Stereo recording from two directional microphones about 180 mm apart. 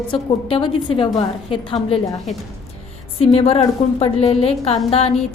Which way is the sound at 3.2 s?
35° left (ahead or behind).